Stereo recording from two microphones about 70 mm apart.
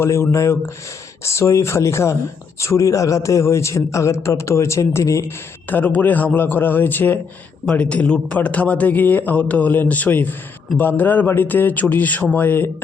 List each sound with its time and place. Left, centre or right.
0.0 s a man's voice: left
5.6 s a man's voice: left
7.6 s a man's voice: centre